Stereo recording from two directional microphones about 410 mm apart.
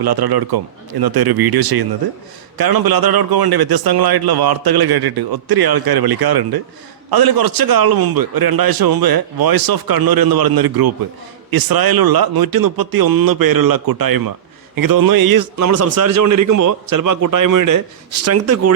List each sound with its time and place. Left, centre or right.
0.0 s a man's voice: right